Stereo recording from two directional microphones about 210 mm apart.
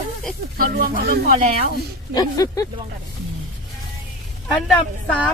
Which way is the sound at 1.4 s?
30° right (ahead or behind).